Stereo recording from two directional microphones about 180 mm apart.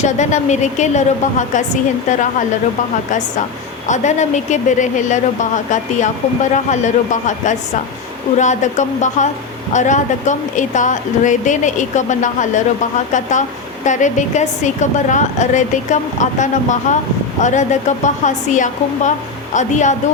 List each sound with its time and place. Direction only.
0.0 s a woman's voice: 40° left (ahead or behind)
3.8 s a woman's voice: 40° left (ahead or behind)
13.8 s a woman's voice: 45° left (ahead or behind)